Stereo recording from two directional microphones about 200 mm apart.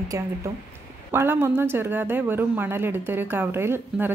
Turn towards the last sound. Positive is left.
turn(degrees=-10)  # may be behind; listen again after turning